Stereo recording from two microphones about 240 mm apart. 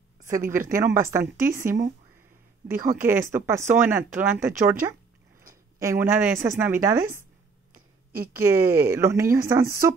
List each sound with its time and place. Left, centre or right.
0.5 s speech: centre
2.7 s speech: right
3.0 s speech: centre
5.8 s speech: centre
7.7 s a sound: right
8.4 s speech: centre